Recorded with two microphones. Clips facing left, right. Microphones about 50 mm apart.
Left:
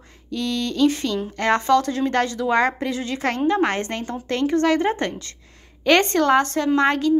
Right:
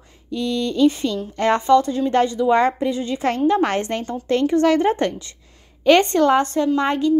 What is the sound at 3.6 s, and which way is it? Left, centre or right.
A woman's voice, left.